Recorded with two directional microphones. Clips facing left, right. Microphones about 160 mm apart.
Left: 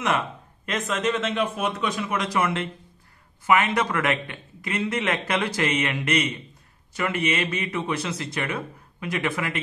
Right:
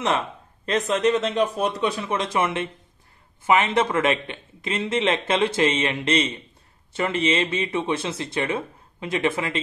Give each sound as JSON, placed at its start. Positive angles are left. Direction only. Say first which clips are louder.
{"t": 0.7, "sound": "a man's voice", "louder": "right 5 dB", "side_deg": -35}